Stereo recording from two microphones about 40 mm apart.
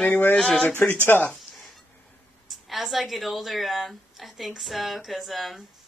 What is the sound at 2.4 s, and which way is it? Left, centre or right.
A woman's voice, centre.